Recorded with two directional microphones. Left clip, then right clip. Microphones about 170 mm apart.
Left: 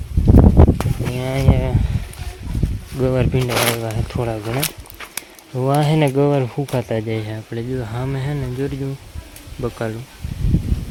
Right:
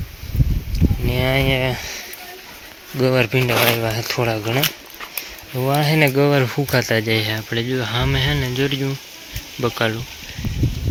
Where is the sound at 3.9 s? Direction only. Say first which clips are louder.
Right 4 dB; 5° left (ahead or behind).